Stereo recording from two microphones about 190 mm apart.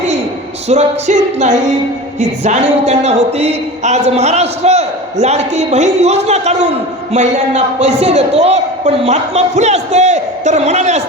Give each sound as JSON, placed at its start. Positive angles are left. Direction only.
{"t": 0.7, "sound": "a man's voice", "side_deg": -35}